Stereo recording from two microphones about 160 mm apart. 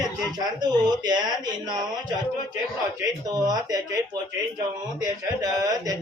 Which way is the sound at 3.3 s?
25° right (ahead or behind).